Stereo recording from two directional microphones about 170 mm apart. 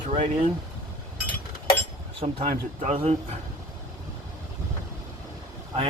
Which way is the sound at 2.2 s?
40° right (ahead or behind).